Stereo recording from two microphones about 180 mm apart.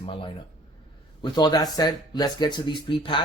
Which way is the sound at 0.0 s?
30° left (ahead or behind).